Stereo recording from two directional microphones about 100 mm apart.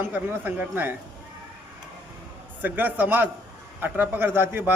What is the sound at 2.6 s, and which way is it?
Speech, 20° right (ahead or behind).